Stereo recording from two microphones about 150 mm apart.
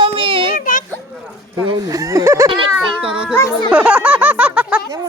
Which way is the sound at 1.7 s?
25° right (ahead or behind).